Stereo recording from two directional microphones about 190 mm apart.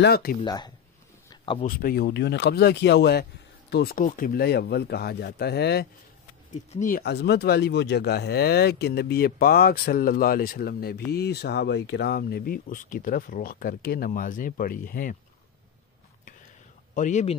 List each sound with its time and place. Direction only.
0.0 s speech: 55° left (ahead or behind)
0.4 s speech: 20° left (ahead or behind)
1.3 s a sound: 25° left (ahead or behind)
1.7 s speech: 50° left (ahead or behind)
6.7 s speech: 45° left (ahead or behind)
16.9 s speech: 40° left (ahead or behind)